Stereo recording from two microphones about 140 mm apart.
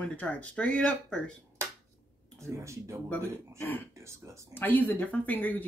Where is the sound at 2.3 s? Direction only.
20° right (ahead or behind).